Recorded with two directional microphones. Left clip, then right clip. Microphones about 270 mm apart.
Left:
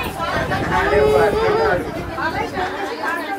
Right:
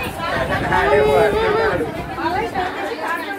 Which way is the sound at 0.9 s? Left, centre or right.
Centre.